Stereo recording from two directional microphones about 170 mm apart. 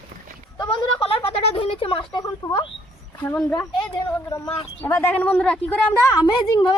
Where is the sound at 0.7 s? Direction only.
35° left (ahead or behind).